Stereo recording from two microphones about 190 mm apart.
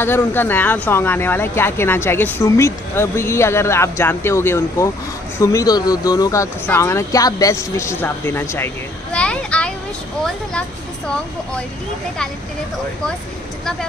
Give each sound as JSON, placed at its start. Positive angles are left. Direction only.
{"t": 0.0, "sound": "speech", "side_deg": 10}